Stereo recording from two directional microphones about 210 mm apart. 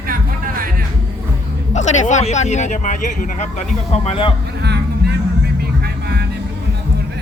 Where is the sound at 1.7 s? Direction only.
35° left (ahead or behind).